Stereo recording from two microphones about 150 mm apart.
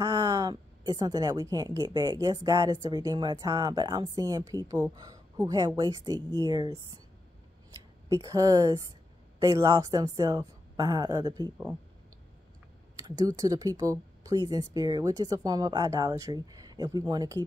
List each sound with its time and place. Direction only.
0.0 s a woman's voice: 25° right (ahead or behind)
8.1 s a woman's voice: 20° right (ahead or behind)
13.0 s a woman's voice: 25° right (ahead or behind)